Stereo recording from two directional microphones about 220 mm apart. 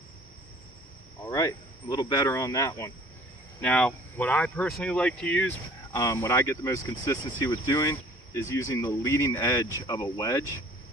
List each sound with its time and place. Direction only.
1.3 s speech: 15° left (ahead or behind)